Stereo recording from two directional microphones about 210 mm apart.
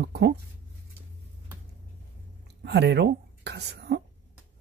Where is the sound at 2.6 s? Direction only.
55° right (ahead or behind).